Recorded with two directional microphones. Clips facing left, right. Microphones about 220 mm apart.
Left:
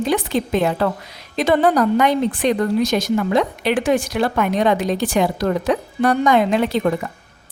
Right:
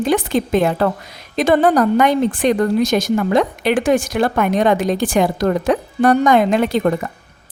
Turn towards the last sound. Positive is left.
turn(degrees=-50)  # may be behind; listen again after turning